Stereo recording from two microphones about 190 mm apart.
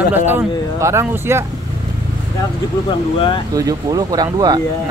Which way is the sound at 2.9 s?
25° left (ahead or behind).